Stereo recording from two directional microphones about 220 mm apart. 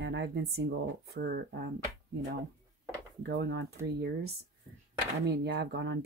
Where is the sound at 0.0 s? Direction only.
50° right (ahead or behind).